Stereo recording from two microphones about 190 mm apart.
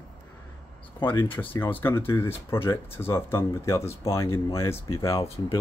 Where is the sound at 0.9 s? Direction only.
25° left (ahead or behind).